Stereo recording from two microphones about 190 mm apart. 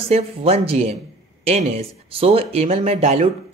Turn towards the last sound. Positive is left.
turn(degrees=-35)  # may be behind; listen again after turning